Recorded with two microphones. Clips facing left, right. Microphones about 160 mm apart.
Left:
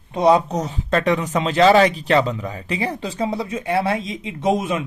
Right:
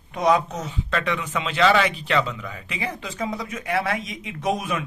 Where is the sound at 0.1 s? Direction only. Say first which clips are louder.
Left 5 dB; 30° left (ahead or behind).